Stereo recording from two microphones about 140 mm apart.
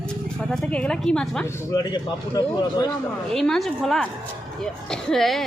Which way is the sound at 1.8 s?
30° left (ahead or behind).